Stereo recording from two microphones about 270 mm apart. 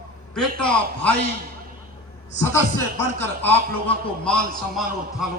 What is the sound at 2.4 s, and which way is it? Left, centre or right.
A man's voice, centre.